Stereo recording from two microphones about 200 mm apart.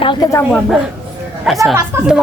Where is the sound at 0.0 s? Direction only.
25° left (ahead or behind).